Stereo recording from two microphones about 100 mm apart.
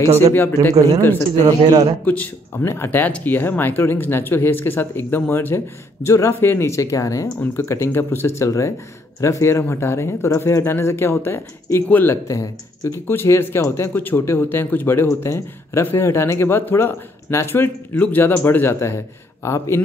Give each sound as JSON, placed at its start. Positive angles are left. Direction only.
{"t": 0.0, "sound": "a man's voice", "side_deg": -35}
{"t": 0.3, "sound": "speech", "side_deg": 20}
{"t": 0.7, "sound": "a man's voice", "side_deg": -35}
{"t": 2.0, "sound": "speech", "side_deg": 15}